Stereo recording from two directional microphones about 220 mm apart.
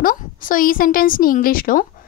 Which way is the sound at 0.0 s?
40° left (ahead or behind).